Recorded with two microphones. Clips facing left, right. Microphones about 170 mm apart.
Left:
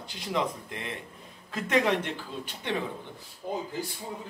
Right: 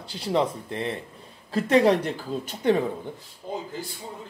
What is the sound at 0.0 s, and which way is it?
Speech, 30° right (ahead or behind).